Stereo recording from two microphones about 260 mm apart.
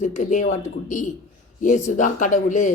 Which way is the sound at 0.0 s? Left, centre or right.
Left.